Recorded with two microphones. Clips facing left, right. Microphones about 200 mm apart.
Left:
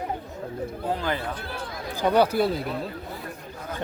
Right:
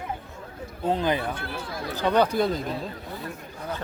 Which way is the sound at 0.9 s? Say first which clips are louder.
Right 4 dB; 20° right (ahead or behind).